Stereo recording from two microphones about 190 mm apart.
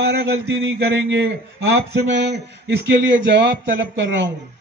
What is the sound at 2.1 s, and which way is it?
Music, 65° right (ahead or behind).